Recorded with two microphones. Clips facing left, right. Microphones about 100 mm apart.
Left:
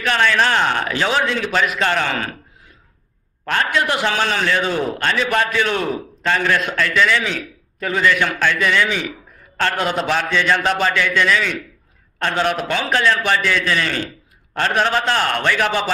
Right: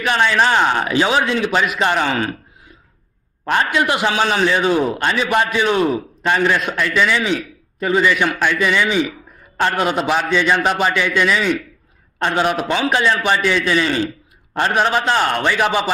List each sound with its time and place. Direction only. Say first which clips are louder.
0.0 s a man's voice: right 1 dB; 15° right (ahead or behind)